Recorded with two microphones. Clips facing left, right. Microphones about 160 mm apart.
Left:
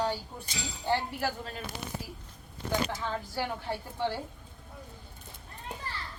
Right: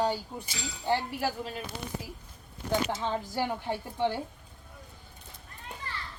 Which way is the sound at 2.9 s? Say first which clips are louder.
Right 3 dB; 20° right (ahead or behind).